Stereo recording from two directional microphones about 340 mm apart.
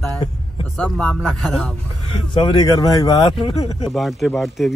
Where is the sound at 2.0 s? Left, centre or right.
Centre.